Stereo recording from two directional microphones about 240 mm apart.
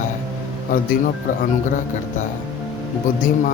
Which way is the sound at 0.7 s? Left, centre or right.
Left.